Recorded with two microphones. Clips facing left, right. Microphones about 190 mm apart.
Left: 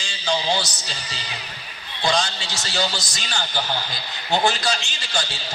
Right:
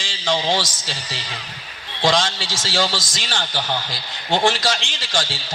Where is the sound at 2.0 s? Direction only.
90° right.